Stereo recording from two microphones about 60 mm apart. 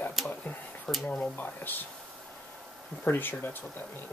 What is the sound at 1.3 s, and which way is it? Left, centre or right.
Speech, left.